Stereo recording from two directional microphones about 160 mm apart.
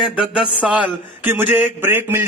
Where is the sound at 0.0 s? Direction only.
5° right (ahead or behind).